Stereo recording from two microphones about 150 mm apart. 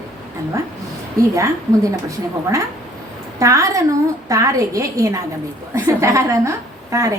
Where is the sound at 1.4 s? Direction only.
20° right (ahead or behind).